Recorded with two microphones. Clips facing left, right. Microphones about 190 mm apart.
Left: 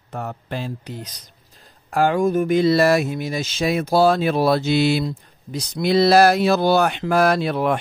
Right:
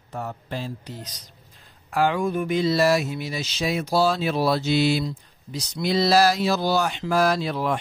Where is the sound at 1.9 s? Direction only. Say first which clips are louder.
Left 4 dB; 45° left (ahead or behind).